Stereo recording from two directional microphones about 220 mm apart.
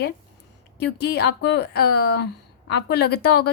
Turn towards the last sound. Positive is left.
turn(degrees=45)  # may be behind; listen again after turning